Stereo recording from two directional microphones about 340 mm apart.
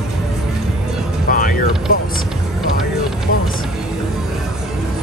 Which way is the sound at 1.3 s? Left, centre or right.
Left.